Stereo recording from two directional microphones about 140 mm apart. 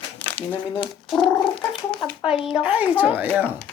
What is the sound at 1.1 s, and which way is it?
Gargling, centre (ahead or behind).